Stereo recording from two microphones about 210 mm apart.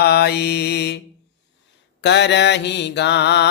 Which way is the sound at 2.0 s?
55° left (ahead or behind).